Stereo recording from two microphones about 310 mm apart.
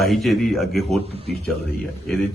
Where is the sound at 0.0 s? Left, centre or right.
Centre.